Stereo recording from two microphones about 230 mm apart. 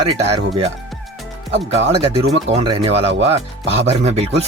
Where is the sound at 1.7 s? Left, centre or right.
Right.